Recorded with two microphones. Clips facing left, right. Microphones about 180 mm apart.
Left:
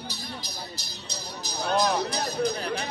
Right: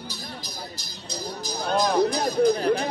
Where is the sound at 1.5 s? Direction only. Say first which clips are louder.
Right 1 dB; 50° right (ahead or behind).